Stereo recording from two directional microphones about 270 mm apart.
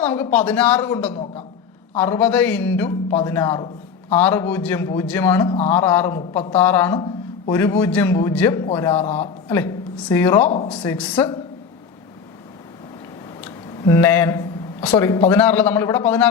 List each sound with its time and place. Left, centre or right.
0.0 s a man's voice: centre
9.0 s a man's voice: left
9.5 s a man's voice: centre
10.5 s a man's voice: left
10.8 s speech: centre
13.4 s a sound: centre
15.3 s a man's voice: centre